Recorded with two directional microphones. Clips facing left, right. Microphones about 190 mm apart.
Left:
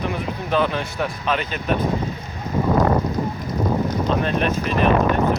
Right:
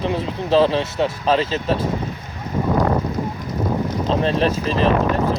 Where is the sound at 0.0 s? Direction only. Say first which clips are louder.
Right 3 dB; 30° right (ahead or behind).